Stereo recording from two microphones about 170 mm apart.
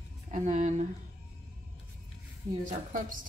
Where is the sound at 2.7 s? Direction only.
50° right (ahead or behind).